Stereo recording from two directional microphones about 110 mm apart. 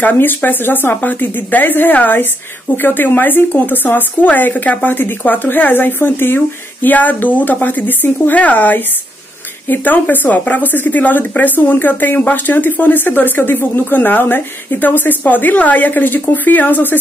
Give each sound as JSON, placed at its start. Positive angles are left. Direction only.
{"t": 0.0, "sound": "a woman's voice", "side_deg": 15}